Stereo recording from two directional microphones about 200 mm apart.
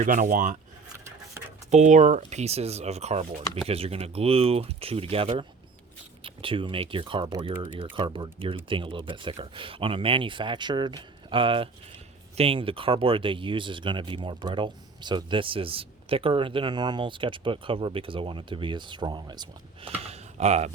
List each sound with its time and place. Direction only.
0.0 s speech: 40° right (ahead or behind)
1.0 s a sound: 10° right (ahead or behind)
1.7 s speech: 35° right (ahead or behind)